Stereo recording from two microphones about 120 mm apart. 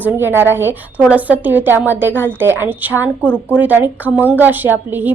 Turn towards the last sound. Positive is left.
turn(degrees=-15)  # may be behind; listen again after turning